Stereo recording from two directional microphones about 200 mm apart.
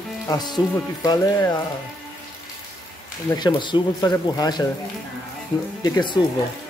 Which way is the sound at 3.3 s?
20° left (ahead or behind).